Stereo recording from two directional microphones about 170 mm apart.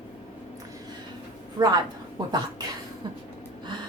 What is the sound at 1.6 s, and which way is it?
Speech, 25° right (ahead or behind).